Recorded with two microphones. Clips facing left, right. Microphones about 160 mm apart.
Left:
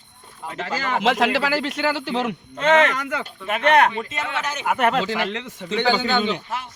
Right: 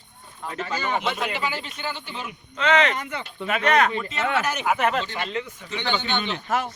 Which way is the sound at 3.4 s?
50° left (ahead or behind).